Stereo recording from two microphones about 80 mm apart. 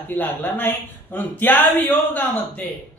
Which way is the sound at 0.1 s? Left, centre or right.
Left.